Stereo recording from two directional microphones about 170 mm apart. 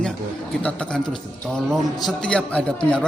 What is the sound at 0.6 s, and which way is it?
A man's voice, 5° left (ahead or behind).